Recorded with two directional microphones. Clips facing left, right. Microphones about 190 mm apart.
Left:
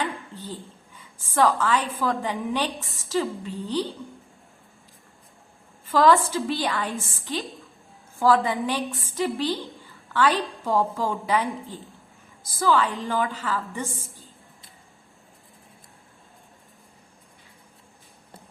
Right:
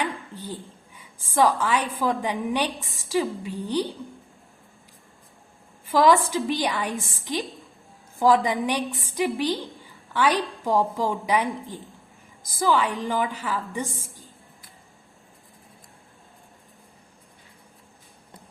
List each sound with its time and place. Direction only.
0.0 s a woman's voice: 10° right (ahead or behind)
5.8 s a woman's voice: 15° right (ahead or behind)